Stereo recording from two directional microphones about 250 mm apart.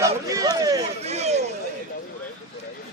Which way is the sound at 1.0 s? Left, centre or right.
Right.